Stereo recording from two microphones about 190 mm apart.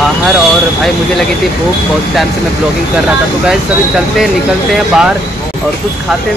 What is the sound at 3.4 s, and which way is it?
Speech, centre (ahead or behind).